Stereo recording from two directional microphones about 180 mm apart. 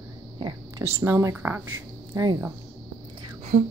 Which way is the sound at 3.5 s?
40° right (ahead or behind).